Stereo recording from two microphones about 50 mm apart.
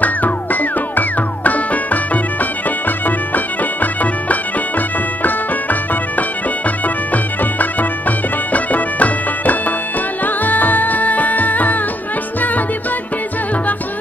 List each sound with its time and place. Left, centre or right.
0.0 s music: left
3.3 s music: left
8.5 s music: left